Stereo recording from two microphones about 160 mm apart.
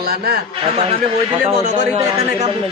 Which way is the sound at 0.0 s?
80° right.